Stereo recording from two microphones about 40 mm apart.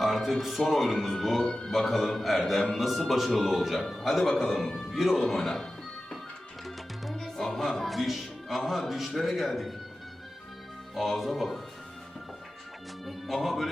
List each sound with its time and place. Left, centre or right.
0.0 s speech: centre
1.5 s a man's voice: centre
1.7 s speech: centre
4.2 s a man's voice: centre
6.7 s music: centre
10.9 s speech: centre
13.1 s music: centre